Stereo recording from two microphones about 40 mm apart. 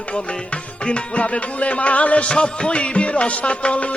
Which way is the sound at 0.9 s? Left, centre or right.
Left.